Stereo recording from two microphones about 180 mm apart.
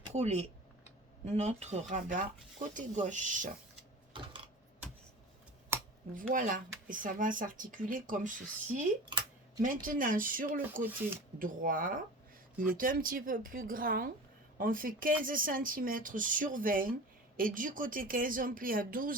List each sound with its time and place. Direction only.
0.1 s speech: 40° right (ahead or behind)
6.1 s speech: 50° right (ahead or behind)